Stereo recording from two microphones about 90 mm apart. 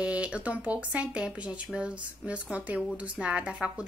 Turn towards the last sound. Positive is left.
turn(degrees=-10)  # may be behind; listen again after turning